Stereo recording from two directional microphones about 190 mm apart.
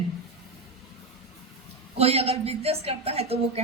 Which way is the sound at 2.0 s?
30° right (ahead or behind).